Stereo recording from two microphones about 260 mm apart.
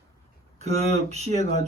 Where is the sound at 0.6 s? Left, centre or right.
Right.